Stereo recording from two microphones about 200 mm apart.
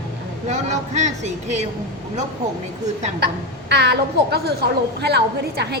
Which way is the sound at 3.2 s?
55° right (ahead or behind).